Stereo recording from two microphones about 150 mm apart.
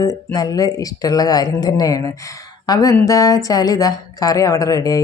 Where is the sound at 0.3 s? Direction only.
25° left (ahead or behind).